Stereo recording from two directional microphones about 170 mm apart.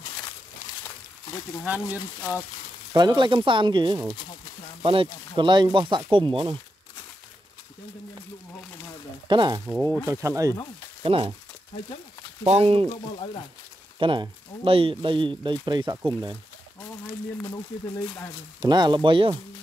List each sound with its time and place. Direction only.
2.9 s speech: 25° right (ahead or behind)
9.3 s speech: 25° right (ahead or behind)
9.7 s speech: 10° right (ahead or behind)
11.0 s speech: 30° right (ahead or behind)
12.4 s speech: 35° right (ahead or behind)
13.9 s speech: 30° right (ahead or behind)
18.6 s speech: 25° right (ahead or behind)